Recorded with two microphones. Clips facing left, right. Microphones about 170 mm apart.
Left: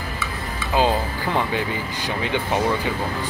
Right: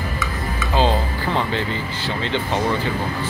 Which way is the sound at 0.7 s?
10° left (ahead or behind).